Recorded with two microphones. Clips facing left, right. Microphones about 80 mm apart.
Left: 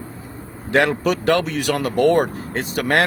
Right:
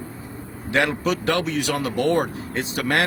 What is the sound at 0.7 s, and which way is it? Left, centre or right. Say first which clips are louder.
Speech: left 4 dB; left.